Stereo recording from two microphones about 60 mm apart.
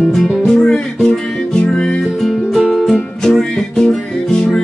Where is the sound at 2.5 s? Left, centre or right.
Centre.